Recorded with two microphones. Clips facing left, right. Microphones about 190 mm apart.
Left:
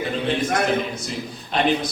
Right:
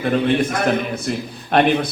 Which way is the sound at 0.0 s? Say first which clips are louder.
Right 6 dB; 60° right (ahead or behind).